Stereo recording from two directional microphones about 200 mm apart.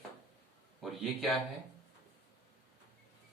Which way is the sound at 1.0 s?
Centre (ahead or behind).